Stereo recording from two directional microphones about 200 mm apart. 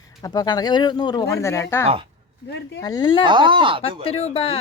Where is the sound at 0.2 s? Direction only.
20° left (ahead or behind).